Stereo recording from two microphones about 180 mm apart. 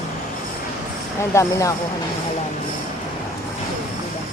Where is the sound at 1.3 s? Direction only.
15° left (ahead or behind).